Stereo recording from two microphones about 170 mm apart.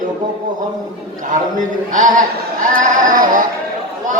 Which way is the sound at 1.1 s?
50° right (ahead or behind).